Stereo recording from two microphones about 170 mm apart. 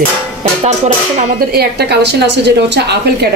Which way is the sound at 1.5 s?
70° right (ahead or behind).